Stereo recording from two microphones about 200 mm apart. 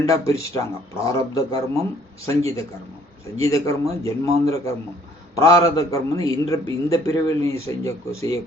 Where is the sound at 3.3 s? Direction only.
15° left (ahead or behind).